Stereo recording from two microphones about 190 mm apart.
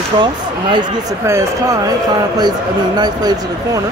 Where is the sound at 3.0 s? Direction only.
20° right (ahead or behind).